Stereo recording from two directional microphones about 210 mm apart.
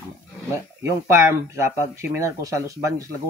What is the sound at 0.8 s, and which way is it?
Speech, 15° right (ahead or behind).